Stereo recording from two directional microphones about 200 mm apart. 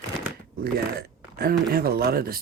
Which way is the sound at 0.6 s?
50° right (ahead or behind).